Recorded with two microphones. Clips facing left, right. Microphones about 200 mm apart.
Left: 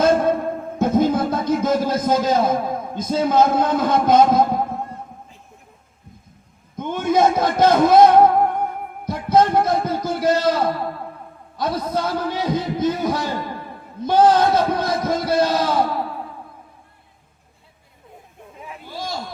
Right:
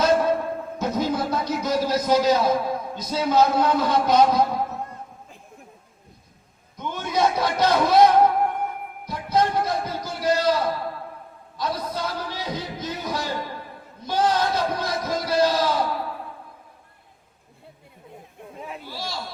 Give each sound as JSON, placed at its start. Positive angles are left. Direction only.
{"t": 0.0, "sound": "music", "side_deg": 50}
{"t": 6.7, "sound": "a man's voice", "side_deg": 50}
{"t": 9.0, "sound": "music", "side_deg": 50}
{"t": 10.2, "sound": "a sound", "side_deg": 50}
{"t": 11.5, "sound": "a man's voice", "side_deg": 55}
{"t": 18.9, "sound": "a sound", "side_deg": 50}